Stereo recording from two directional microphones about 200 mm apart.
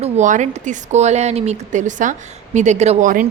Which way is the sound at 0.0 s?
35° right (ahead or behind).